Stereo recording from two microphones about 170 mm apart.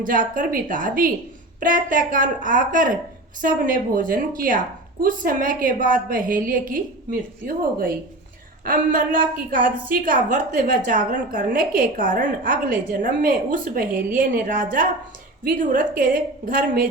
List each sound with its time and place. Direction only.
0.0 s a woman's voice: 50° right (ahead or behind)